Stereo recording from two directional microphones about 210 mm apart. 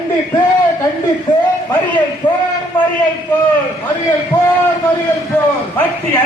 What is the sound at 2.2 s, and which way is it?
Speech, 20° left (ahead or behind).